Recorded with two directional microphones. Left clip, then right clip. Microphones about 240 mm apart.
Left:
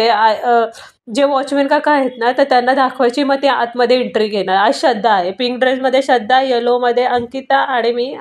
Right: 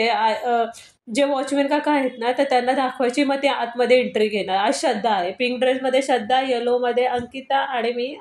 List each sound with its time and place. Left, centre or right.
0.0 s a woman's voice: left